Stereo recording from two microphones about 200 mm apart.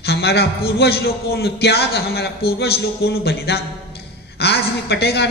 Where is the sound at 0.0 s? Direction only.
55° left (ahead or behind).